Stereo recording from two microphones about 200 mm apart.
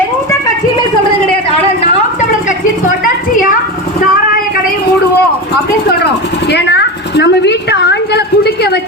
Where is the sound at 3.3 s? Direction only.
40° left (ahead or behind).